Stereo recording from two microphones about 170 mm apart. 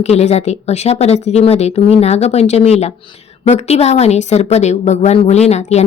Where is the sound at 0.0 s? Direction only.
40° left (ahead or behind).